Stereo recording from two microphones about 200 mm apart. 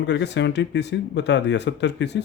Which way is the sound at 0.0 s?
60° left (ahead or behind).